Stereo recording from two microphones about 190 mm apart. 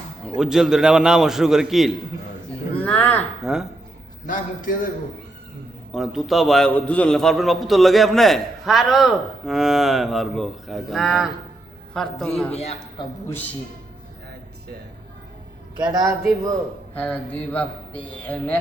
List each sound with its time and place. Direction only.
0.3 s a man's voice: 5° right (ahead or behind)
3.4 s a man's voice: 5° right (ahead or behind)
4.3 s a man's voice: 45° left (ahead or behind)
5.9 s a man's voice: centre (ahead or behind)
12.5 s a man's voice: 35° left (ahead or behind)
13.2 s a man's voice: 10° left (ahead or behind)
15.9 s a man's voice: 20° right (ahead or behind)
16.9 s a man's voice: 10° left (ahead or behind)